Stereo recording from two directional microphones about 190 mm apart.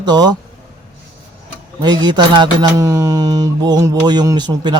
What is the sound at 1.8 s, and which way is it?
Speech, 20° right (ahead or behind).